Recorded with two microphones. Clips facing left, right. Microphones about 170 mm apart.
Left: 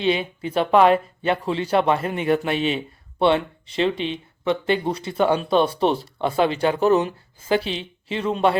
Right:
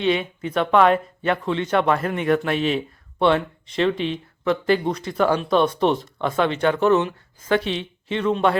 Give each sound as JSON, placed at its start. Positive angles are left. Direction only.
{"t": 0.0, "sound": "speech", "side_deg": 30}
{"t": 2.5, "sound": "speech", "side_deg": 0}
{"t": 3.2, "sound": "speech", "side_deg": 30}
{"t": 3.8, "sound": "speech", "side_deg": 0}
{"t": 4.7, "sound": "speech", "side_deg": 30}